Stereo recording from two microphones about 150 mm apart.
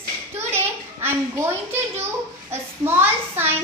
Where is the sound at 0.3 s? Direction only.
15° right (ahead or behind).